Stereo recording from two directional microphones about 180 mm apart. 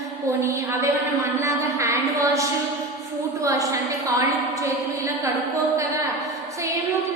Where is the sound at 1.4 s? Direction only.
15° right (ahead or behind).